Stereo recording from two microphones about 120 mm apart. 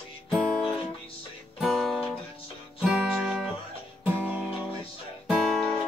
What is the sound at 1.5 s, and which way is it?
Music, centre (ahead or behind).